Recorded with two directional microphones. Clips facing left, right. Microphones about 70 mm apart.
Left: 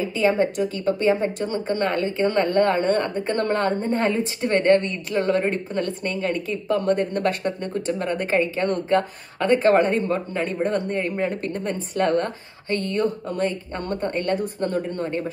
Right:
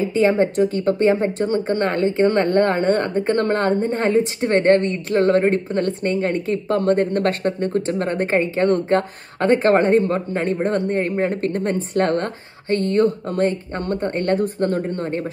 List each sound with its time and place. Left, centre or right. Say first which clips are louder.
0.0 s speech: right 3 dB; right